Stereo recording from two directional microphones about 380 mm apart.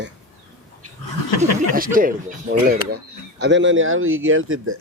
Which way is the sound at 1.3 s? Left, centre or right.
Left.